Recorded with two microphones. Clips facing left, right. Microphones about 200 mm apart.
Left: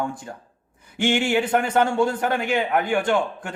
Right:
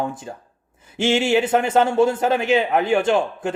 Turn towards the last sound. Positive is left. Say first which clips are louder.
# right 3 dB
turn(degrees=-25)  # may be behind; listen again after turning